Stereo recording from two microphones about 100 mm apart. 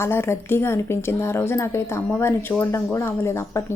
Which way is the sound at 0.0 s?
25° left (ahead or behind).